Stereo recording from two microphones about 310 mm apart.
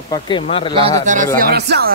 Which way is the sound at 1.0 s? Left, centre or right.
Right.